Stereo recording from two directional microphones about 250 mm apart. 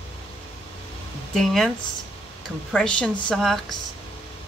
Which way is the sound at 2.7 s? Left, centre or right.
Centre.